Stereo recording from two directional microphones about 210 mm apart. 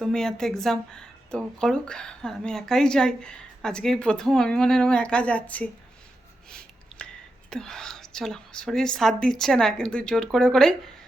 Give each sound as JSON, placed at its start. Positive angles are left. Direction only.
{"t": 0.0, "sound": "speech", "side_deg": 0}
{"t": 6.5, "sound": "a sound", "side_deg": 5}
{"t": 7.5, "sound": "speech", "side_deg": 5}